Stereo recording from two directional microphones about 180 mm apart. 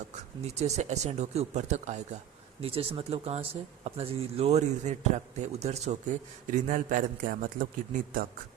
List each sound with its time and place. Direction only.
0.4 s a man's voice: 40° right (ahead or behind)